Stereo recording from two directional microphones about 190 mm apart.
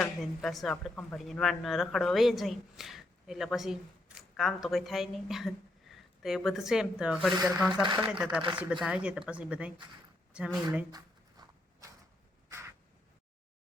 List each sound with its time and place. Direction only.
0.4 s speech: centre (ahead or behind)
7.7 s speech: 25° right (ahead or behind)
8.1 s speech: 5° right (ahead or behind)
10.7 s a sound: 20° right (ahead or behind)
12.5 s crow: 15° right (ahead or behind)